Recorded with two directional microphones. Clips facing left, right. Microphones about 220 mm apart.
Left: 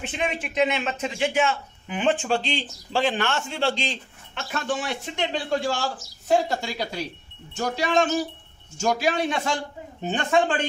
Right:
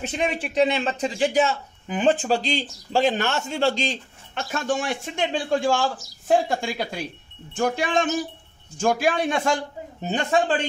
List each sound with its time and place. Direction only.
0.0 s a man's voice: 35° right (ahead or behind)